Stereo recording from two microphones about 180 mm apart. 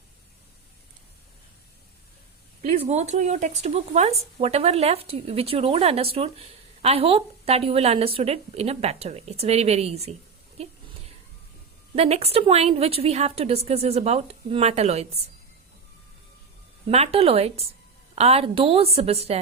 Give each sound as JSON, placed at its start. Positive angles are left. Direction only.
{"t": 2.6, "sound": "speech", "side_deg": -35}
{"t": 11.9, "sound": "speech", "side_deg": -35}
{"t": 16.9, "sound": "speech", "side_deg": -35}